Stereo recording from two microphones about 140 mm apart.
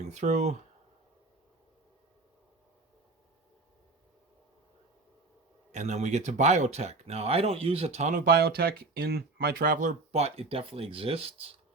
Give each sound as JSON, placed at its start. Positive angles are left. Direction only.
{"t": 0.0, "sound": "speech", "side_deg": -55}
{"t": 5.7, "sound": "speech", "side_deg": -55}